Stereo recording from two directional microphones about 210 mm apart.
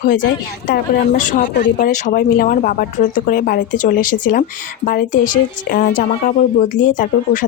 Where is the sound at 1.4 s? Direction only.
55° left (ahead or behind).